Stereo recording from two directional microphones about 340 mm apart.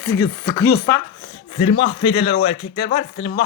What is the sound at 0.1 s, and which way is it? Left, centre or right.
Speech, centre.